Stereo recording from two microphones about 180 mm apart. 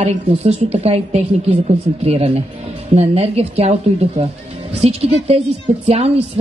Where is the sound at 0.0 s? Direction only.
35° right (ahead or behind).